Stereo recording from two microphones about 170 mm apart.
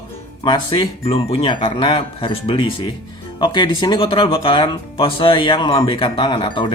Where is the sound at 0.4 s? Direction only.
25° left (ahead or behind).